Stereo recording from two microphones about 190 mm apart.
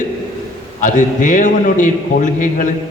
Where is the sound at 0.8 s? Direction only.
40° left (ahead or behind).